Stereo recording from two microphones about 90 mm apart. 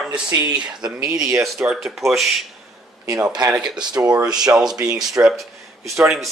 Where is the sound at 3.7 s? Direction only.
50° right (ahead or behind).